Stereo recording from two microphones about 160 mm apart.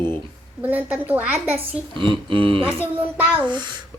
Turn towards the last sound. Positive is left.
turn(degrees=-10)  # may be behind; listen again after turning